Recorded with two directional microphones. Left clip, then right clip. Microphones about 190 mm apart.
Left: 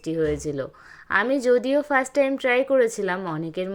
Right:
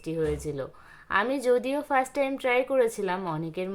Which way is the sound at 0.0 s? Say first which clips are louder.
Left 5 dB; 20° left (ahead or behind).